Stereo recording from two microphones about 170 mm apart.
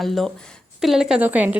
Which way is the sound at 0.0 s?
Centre (ahead or behind).